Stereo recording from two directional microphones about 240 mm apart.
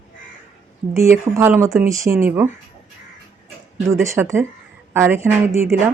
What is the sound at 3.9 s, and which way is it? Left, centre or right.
Speech, centre.